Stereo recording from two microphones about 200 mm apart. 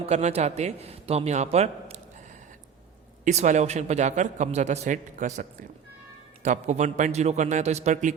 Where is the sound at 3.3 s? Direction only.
35° right (ahead or behind).